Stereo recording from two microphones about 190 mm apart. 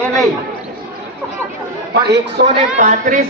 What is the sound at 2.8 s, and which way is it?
Speech, 40° right (ahead or behind).